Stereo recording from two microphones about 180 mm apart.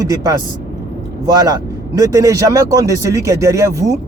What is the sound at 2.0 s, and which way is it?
Speech, 15° right (ahead or behind).